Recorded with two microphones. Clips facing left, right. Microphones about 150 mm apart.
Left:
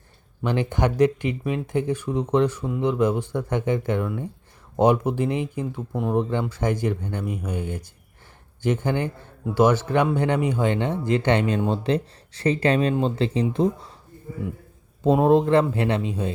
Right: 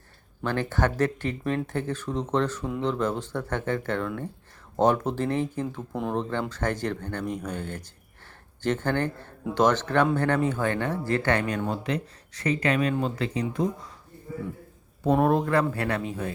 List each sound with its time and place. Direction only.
0.4 s speech: 15° left (ahead or behind)
5.7 s speech: 5° left (ahead or behind); by 13.9 s 25° left (ahead or behind)
15.0 s speech: 20° left (ahead or behind)